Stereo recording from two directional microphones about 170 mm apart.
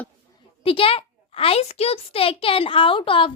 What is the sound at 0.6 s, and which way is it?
A child's voice, 30° left (ahead or behind).